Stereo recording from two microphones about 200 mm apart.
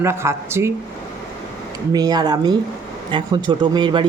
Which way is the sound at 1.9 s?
20° right (ahead or behind).